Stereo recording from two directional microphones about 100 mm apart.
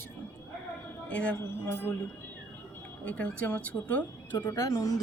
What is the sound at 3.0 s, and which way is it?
Speech, 15° left (ahead or behind).